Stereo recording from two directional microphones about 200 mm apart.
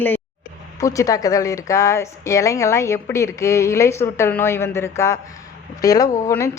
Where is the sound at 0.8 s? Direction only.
15° left (ahead or behind).